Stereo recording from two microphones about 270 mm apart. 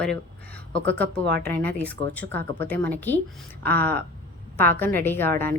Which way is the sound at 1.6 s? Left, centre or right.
Centre.